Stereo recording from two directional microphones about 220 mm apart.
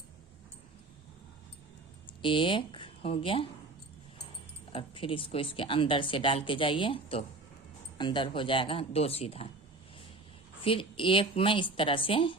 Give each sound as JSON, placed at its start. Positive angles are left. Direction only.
{"t": 2.2, "sound": "speech", "side_deg": 25}
{"t": 4.7, "sound": "speech", "side_deg": 25}
{"t": 10.6, "sound": "speech", "side_deg": 25}